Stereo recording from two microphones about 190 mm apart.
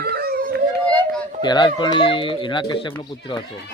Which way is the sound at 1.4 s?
25° left (ahead or behind).